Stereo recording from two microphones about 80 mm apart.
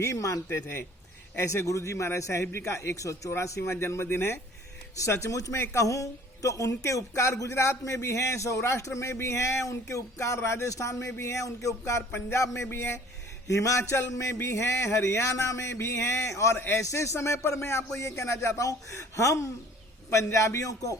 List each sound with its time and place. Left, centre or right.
0.0 s a man's voice: left
0.5 s a man's voice: left
13.5 s a man's voice: left